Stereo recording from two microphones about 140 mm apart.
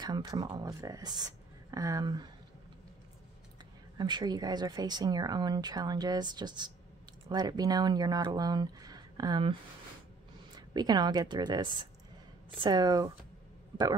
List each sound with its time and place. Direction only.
0.0 s speech: 30° right (ahead or behind)
4.0 s speech: 30° right (ahead or behind)
10.7 s a woman's voice: 30° right (ahead or behind)